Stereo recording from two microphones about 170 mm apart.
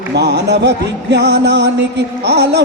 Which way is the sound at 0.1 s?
80° right.